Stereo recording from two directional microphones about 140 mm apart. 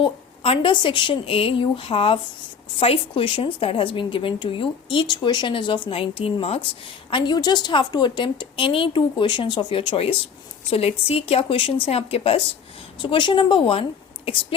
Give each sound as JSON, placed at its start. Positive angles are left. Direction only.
{"t": 0.0, "sound": "a woman's voice", "side_deg": 40}
{"t": 13.0, "sound": "a woman's voice", "side_deg": 35}